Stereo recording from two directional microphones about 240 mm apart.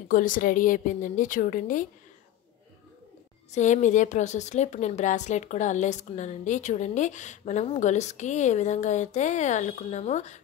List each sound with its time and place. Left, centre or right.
0.1 s a woman's voice: left
3.5 s a woman's voice: left